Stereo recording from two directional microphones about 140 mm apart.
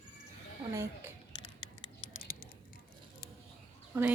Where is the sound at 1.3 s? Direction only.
35° left (ahead or behind).